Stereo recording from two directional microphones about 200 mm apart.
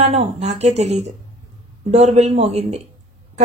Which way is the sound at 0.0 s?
35° right (ahead or behind).